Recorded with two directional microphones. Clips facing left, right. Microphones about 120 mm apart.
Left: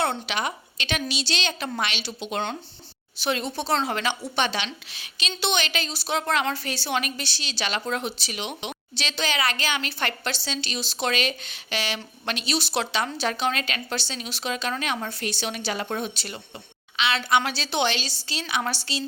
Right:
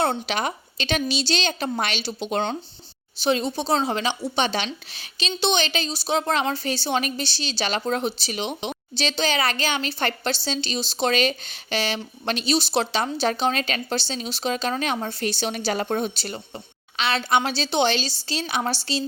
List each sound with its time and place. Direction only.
0.3 s a woman's voice: 35° right (ahead or behind)
3.2 s a woman's voice: 25° right (ahead or behind)
4.5 s a woman's voice: 35° right (ahead or behind)